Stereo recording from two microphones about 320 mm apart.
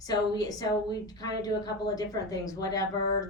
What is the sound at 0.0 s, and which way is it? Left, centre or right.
A woman's voice, centre.